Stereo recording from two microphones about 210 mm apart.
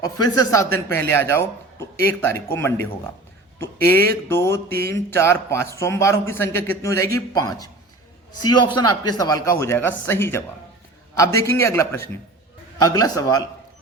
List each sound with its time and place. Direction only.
0.0 s a man's voice: 15° left (ahead or behind)